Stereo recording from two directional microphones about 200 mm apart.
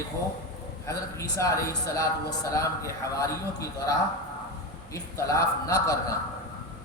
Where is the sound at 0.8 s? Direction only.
15° left (ahead or behind).